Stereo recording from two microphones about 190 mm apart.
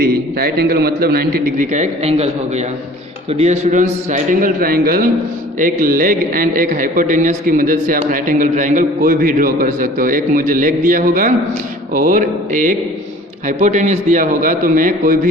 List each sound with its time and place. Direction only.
0.0 s a man's voice: 55° right (ahead or behind); by 2.3 s 35° right (ahead or behind)
3.3 s a man's voice: 35° right (ahead or behind)